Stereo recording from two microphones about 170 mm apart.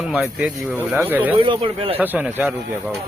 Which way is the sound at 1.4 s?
30° right (ahead or behind).